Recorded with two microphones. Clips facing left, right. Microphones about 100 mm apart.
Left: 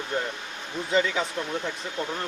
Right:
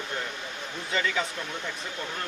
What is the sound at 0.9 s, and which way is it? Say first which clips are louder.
Speech: left 4 dB; 30° left (ahead or behind).